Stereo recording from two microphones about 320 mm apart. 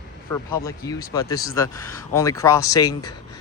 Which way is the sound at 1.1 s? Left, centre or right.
Centre.